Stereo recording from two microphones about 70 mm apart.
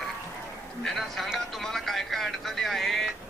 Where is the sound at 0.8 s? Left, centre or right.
Centre.